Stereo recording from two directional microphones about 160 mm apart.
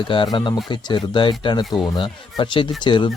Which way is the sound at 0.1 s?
30° left (ahead or behind).